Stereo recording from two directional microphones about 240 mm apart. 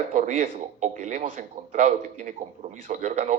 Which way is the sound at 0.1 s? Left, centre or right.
Right.